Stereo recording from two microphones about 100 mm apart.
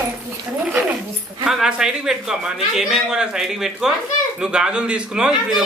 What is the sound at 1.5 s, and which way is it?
Speech, 5° right (ahead or behind).